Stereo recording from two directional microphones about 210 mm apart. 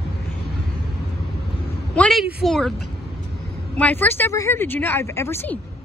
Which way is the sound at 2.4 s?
Centre (ahead or behind).